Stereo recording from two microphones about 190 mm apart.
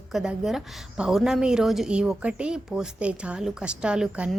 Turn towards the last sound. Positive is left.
turn(degrees=-5)  # may be behind; listen again after turning